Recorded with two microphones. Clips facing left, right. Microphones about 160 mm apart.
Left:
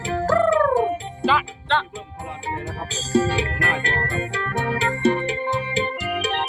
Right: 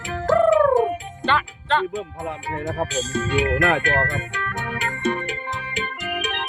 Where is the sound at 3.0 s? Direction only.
35° left (ahead or behind).